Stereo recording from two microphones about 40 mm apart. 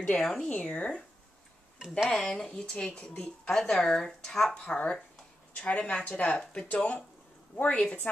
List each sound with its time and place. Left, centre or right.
0.2 s speech: centre
0.5 s speech: left
2.0 s speech: centre
3.5 s speech: centre
4.6 s a woman's voice: left